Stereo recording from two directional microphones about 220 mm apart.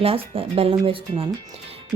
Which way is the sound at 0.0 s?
25° right (ahead or behind).